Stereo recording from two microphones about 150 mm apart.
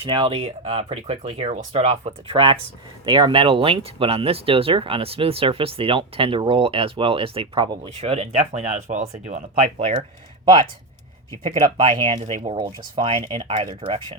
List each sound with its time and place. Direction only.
0.0 s speech: 35° right (ahead or behind); by 9.9 s 50° right (ahead or behind)
11.4 s speech: 40° right (ahead or behind)